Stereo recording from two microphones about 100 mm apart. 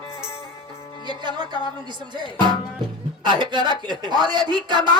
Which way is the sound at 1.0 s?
50° right (ahead or behind).